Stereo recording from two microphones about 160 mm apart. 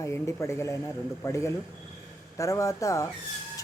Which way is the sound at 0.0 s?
20° left (ahead or behind).